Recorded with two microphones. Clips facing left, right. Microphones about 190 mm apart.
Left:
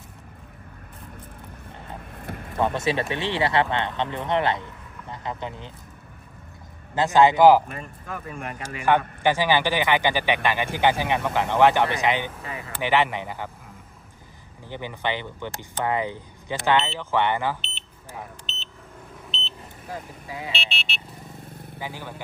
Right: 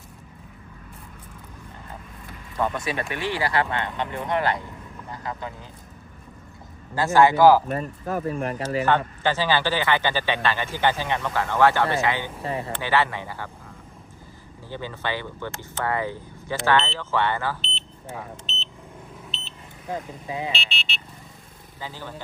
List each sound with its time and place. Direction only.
2.2 s vehicle: 60° left (ahead or behind)
2.6 s speech: 25° left (ahead or behind)
6.9 s speech: 20° left (ahead or behind)
7.7 s speech: 40° right (ahead or behind)
8.8 s speech: 15° left (ahead or behind)
12.4 s speech: 30° right (ahead or behind)
12.8 s speech: 15° left (ahead or behind)
14.7 s speech: 15° left (ahead or behind)
19.9 s speech: 20° right (ahead or behind)
20.5 s speech: centre (ahead or behind)
21.8 s speech: 15° left (ahead or behind)